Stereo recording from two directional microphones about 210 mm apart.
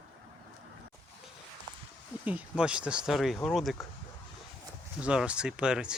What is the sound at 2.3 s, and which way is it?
Speech, 5° right (ahead or behind).